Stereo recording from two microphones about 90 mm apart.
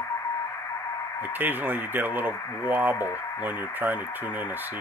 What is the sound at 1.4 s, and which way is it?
Speech, 20° right (ahead or behind).